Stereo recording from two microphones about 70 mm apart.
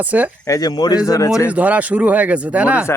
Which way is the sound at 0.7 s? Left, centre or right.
Left.